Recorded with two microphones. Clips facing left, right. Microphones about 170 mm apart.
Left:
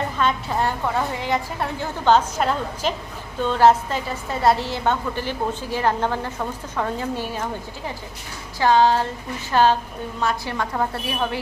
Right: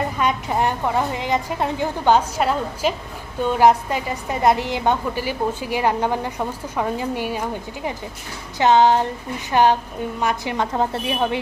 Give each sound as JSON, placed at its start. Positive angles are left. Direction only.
{"t": 0.2, "sound": "a woman's voice", "side_deg": -15}
{"t": 8.5, "sound": "a woman's voice", "side_deg": -20}